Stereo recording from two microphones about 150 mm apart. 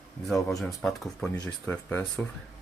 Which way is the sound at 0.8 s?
5° left (ahead or behind).